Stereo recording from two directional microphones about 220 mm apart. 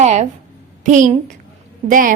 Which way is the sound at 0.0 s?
35° right (ahead or behind).